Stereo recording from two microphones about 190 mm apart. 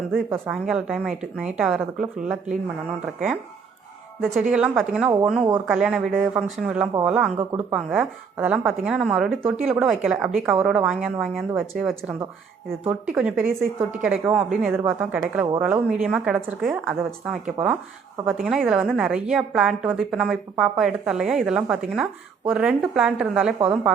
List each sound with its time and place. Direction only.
0.3 s a woman's voice: 5° right (ahead or behind)
4.2 s a woman's voice: 5° right (ahead or behind)